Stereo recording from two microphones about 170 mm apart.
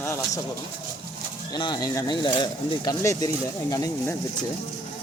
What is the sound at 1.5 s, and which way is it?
Speech, 25° left (ahead or behind).